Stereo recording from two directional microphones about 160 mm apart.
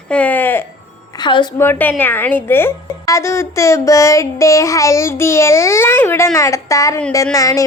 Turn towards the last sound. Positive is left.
turn(degrees=20)  # may be behind; listen again after turning